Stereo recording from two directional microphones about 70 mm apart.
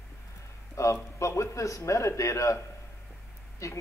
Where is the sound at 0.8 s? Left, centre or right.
Left.